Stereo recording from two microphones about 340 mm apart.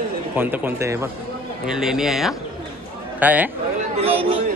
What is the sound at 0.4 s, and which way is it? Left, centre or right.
A man's voice, centre.